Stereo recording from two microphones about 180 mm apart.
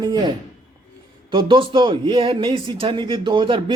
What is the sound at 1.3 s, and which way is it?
Speech, 25° right (ahead or behind).